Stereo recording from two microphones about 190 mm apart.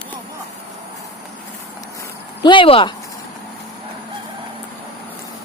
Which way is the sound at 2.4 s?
25° left (ahead or behind).